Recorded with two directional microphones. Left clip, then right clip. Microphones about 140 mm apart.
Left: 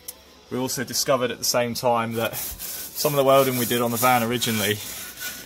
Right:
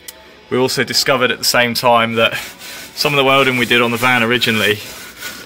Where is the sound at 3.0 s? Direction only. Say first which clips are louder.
Right 6 dB; 25° left (ahead or behind).